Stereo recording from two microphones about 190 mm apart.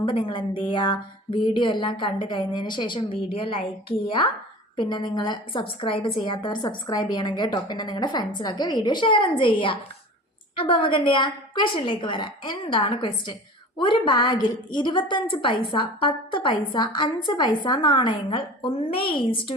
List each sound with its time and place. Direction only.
0.0 s a woman's voice: 25° left (ahead or behind)